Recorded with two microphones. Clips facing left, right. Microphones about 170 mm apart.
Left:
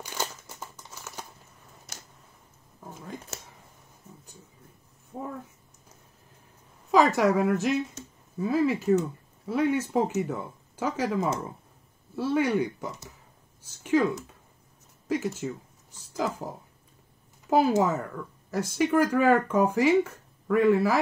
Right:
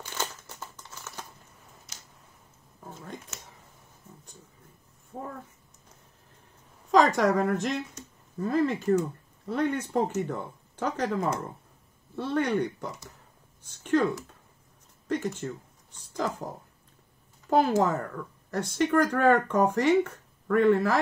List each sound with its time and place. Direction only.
0.0 s crumpling: 10° left (ahead or behind)
3.3 s a sound: 35° left (ahead or behind)
5.1 s a sound: 5° left (ahead or behind)
6.9 s speech: 5° left (ahead or behind)
15.0 s speech: 5° left (ahead or behind)
17.5 s speech: 5° left (ahead or behind)